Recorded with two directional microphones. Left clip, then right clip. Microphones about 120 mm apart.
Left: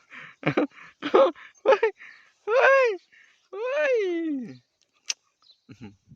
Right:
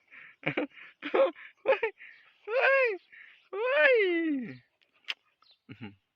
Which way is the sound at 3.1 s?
30° left (ahead or behind).